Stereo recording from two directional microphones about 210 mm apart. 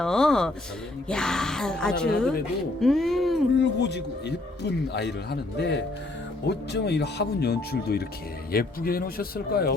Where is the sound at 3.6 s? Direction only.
55° left (ahead or behind).